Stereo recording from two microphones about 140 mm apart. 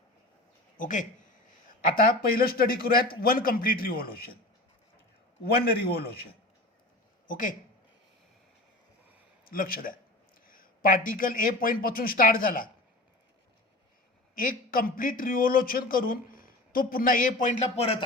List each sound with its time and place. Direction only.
0.8 s speech: 65° left (ahead or behind)
2.0 s a man's voice: 90° left
5.6 s a man's voice: 90° left
7.3 s speech: 70° left (ahead or behind)
9.5 s a man's voice: 90° left
14.3 s a man's voice: 80° left
17.7 s speech: 45° left (ahead or behind)